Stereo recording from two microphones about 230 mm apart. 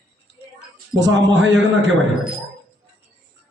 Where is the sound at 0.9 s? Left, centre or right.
Right.